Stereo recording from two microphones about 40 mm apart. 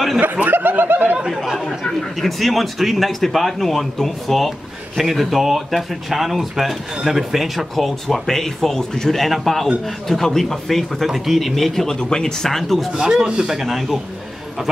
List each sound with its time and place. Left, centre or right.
0.2 s speech: right
1.3 s speech: centre
12.9 s speech: centre
13.6 s speech: centre